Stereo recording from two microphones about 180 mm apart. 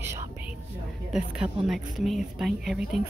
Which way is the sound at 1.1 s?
5° right (ahead or behind).